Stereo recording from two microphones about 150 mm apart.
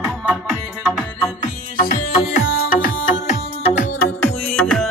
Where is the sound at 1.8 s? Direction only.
80° left; by 4.0 s 55° left (ahead or behind).